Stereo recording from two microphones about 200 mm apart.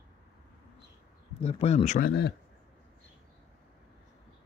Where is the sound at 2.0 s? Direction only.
50° left (ahead or behind).